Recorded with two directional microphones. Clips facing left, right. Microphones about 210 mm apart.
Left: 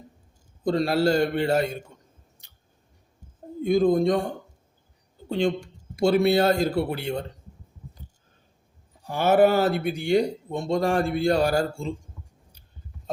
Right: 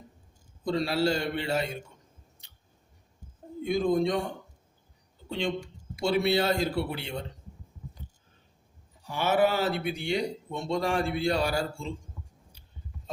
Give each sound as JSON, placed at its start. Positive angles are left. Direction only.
{"t": 0.6, "sound": "speech", "side_deg": 45}
{"t": 3.6, "sound": "speech", "side_deg": 45}
{"t": 6.0, "sound": "speech", "side_deg": 45}
{"t": 9.0, "sound": "speech", "side_deg": 50}